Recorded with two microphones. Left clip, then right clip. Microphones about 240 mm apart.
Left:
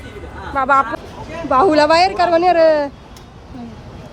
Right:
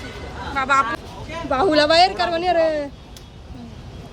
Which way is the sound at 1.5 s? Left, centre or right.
Right.